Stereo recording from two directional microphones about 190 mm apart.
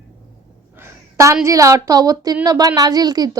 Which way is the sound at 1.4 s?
15° right (ahead or behind).